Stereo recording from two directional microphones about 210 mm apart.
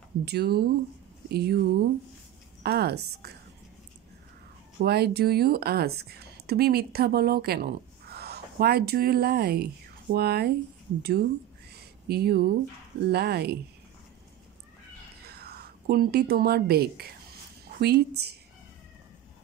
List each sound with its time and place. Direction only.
0.2 s speech: 50° right (ahead or behind)
4.8 s speech: 50° right (ahead or behind)
11.7 s a sound: 50° right (ahead or behind)
13.0 s speech: 50° right (ahead or behind)
15.2 s speech: 50° right (ahead or behind)